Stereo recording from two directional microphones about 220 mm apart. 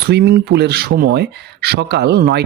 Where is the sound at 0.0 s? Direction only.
45° right (ahead or behind).